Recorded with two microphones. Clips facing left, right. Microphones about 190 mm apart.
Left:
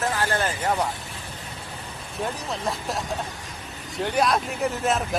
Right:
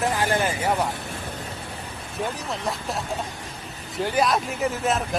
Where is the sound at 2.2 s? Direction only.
Centre (ahead or behind).